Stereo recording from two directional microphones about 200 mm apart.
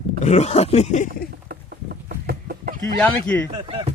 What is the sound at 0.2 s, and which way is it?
Speech, 35° left (ahead or behind).